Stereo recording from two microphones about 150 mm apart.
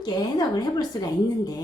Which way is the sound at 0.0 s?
25° left (ahead or behind).